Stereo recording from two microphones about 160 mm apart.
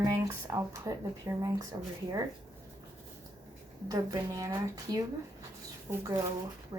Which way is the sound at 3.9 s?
20° right (ahead or behind).